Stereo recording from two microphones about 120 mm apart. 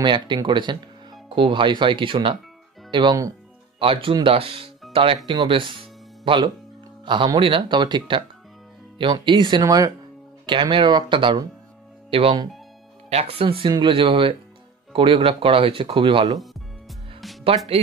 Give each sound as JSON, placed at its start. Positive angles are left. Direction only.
{"t": 0.0, "sound": "speech", "side_deg": -40}
{"t": 10.4, "sound": "speech", "side_deg": -45}
{"t": 13.7, "sound": "speech", "side_deg": -40}